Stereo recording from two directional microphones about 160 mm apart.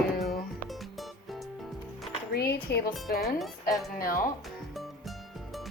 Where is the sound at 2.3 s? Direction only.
80° left.